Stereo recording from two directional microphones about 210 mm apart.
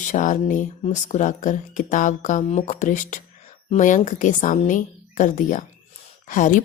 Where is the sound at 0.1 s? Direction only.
35° left (ahead or behind).